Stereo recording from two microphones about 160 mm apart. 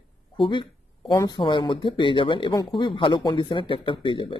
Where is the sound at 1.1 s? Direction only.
20° left (ahead or behind).